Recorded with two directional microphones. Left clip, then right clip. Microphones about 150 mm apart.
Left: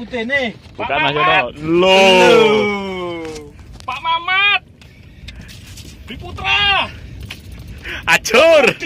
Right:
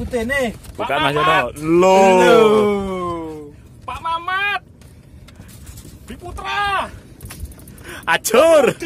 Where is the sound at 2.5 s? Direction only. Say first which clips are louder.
Even; 60° right (ahead or behind).